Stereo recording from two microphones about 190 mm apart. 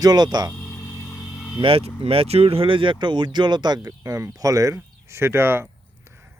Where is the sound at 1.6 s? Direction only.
30° right (ahead or behind).